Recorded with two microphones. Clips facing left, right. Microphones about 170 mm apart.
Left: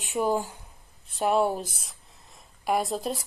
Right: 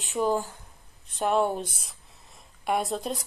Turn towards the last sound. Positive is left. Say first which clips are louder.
# left 1 dB
turn(degrees=0)  # may be behind; listen again after turning